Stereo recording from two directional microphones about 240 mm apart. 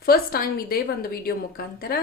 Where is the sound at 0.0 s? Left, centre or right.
Left.